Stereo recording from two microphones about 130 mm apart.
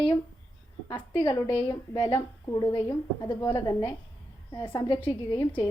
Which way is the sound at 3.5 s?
40° left (ahead or behind).